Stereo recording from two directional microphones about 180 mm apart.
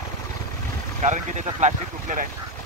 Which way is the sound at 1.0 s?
40° right (ahead or behind).